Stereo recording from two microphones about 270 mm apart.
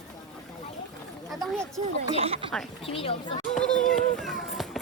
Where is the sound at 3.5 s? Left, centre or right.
Centre.